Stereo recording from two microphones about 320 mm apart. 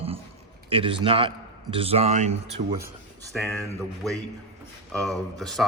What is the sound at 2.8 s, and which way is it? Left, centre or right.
Speech, centre.